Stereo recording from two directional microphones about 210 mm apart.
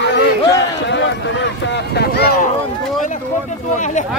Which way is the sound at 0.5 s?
55° left (ahead or behind).